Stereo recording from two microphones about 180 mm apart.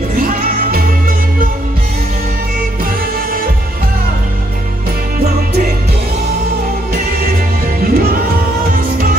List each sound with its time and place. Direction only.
0.1 s music: 55° right (ahead or behind)
6.9 s music: 55° right (ahead or behind)